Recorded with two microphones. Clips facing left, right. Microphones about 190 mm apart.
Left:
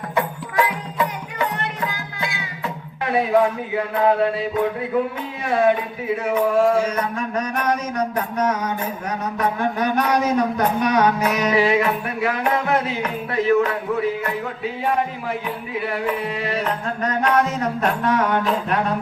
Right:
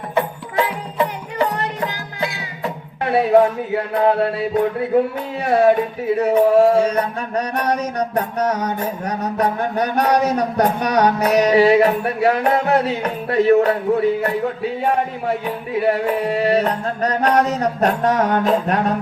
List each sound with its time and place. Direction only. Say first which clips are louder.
0.2 s music: right 2 dB; 30° right (ahead or behind)
5.5 s music: right 4 dB; 40° right (ahead or behind)